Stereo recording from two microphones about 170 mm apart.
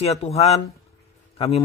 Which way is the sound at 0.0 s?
40° left (ahead or behind).